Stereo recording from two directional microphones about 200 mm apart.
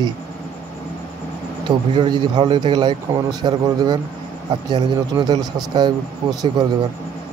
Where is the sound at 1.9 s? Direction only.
20° right (ahead or behind).